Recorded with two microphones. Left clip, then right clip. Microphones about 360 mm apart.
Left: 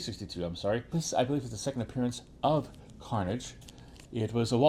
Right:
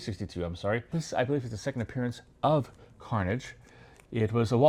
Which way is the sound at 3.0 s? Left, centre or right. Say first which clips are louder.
Right 2 dB; right.